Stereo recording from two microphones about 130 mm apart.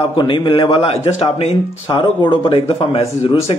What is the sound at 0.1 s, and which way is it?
A man's voice, 35° left (ahead or behind).